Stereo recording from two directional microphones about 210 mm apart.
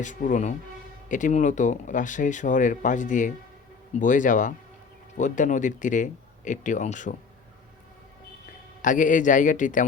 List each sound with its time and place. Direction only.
0.0 s speech: 35° left (ahead or behind)
8.8 s speech: 40° left (ahead or behind)